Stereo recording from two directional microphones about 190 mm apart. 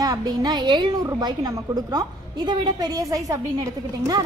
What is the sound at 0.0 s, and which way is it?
A woman's voice, 20° right (ahead or behind).